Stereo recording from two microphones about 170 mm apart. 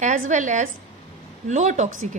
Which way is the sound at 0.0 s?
45° right (ahead or behind).